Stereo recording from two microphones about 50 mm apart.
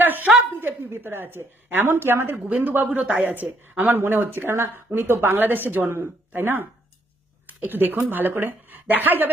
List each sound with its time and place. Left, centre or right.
0.0 s a sound: right
0.9 s a woman's voice: right
2.5 s speech: right
3.9 s a woman's voice: right
4.5 s a woman's voice: right